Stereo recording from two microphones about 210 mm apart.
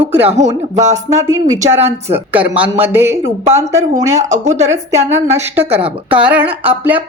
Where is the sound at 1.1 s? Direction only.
15° right (ahead or behind).